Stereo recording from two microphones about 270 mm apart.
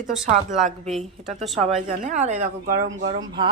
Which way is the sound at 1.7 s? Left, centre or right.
Right.